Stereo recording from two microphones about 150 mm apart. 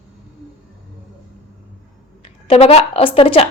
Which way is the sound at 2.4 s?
40° left (ahead or behind).